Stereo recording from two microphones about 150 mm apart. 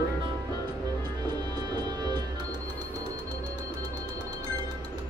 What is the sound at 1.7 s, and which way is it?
Music, 30° right (ahead or behind).